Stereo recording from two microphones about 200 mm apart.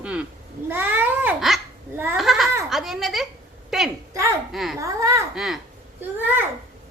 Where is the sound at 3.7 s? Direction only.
Centre (ahead or behind).